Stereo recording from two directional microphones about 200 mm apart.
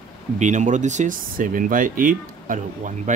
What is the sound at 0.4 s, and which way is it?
Speech, 35° right (ahead or behind).